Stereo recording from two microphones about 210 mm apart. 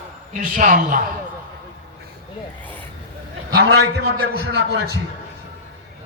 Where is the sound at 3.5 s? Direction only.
50° right (ahead or behind).